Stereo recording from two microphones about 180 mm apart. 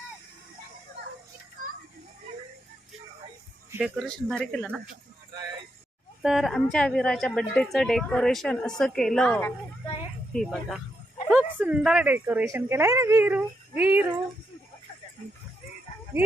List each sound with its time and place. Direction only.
3.7 s speech: 5° right (ahead or behind)
5.3 s music: 25° right (ahead or behind)
6.2 s speech: centre (ahead or behind)